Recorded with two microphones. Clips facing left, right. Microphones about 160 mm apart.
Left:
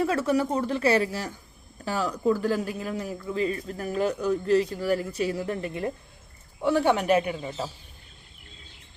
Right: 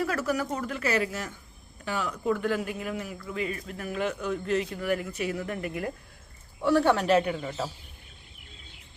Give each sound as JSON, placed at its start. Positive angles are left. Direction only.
{"t": 0.0, "sound": "speech", "side_deg": 25}
{"t": 6.6, "sound": "a man's voice", "side_deg": 15}